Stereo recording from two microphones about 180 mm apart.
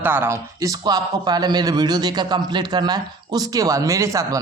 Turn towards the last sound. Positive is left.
turn(degrees=-20)  # may be behind; listen again after turning